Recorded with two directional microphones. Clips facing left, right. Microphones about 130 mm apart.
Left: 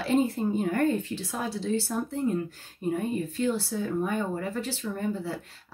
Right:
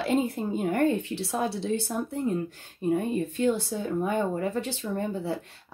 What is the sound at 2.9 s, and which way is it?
Speech, 25° right (ahead or behind).